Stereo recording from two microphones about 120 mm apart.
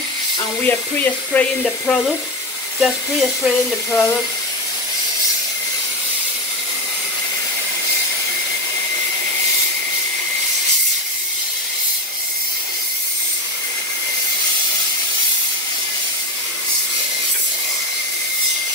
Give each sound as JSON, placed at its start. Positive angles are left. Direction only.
{"t": 0.6, "sound": "speech", "side_deg": 15}
{"t": 1.6, "sound": "speech", "side_deg": 0}
{"t": 3.9, "sound": "speech", "side_deg": 15}